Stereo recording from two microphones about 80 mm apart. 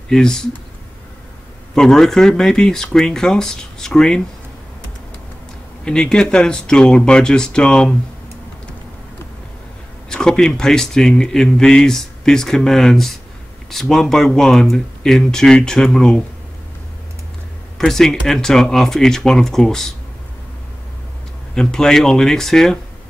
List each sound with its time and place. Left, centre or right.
0.1 s speech: centre
1.8 s speech: centre
5.9 s speech: centre
10.0 s speech: centre
17.7 s speech: centre
21.5 s speech: centre